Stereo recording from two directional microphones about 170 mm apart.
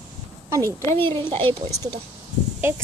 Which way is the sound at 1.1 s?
30° right (ahead or behind).